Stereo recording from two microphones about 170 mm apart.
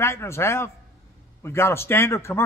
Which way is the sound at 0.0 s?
15° left (ahead or behind).